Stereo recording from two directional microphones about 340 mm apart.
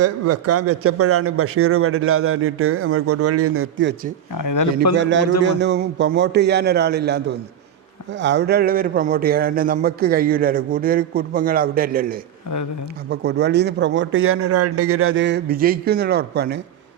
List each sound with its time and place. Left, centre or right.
0.0 s a man's voice: right
4.4 s speech: left
4.9 s a man's voice: right